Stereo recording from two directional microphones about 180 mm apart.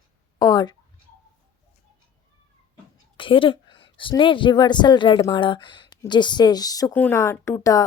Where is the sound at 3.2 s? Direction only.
30° left (ahead or behind).